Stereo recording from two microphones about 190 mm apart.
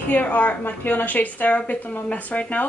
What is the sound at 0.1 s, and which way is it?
Speech, 10° left (ahead or behind).